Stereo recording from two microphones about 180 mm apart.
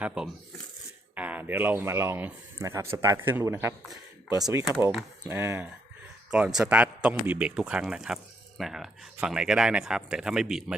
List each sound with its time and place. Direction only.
0.0 s a man's voice: 5° right (ahead or behind)